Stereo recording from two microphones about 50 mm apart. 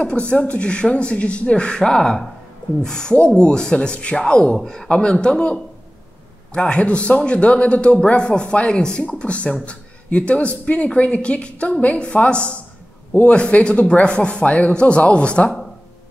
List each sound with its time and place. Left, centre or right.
0.0 s a man's voice: left
3.2 s a man's voice: left